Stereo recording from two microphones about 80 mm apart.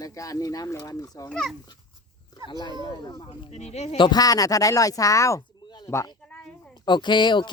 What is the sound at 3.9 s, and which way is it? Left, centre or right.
Speech, left.